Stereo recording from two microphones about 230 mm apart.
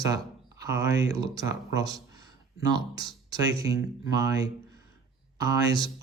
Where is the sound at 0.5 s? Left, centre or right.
Centre.